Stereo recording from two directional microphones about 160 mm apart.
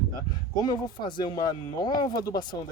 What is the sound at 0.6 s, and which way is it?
Speech, 25° left (ahead or behind).